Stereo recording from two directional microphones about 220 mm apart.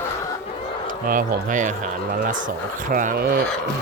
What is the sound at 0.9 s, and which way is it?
Speech, 40° right (ahead or behind).